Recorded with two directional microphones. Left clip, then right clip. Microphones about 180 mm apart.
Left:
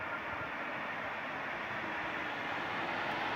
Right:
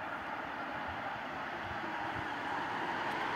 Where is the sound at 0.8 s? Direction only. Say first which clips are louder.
Left 1 dB; 35° left (ahead or behind); by 3.3 s 60° left (ahead or behind).